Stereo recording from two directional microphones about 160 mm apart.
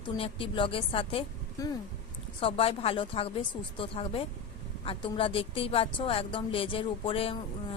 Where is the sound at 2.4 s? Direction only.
35° left (ahead or behind).